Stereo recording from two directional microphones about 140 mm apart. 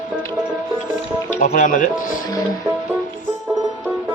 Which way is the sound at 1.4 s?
70° left (ahead or behind).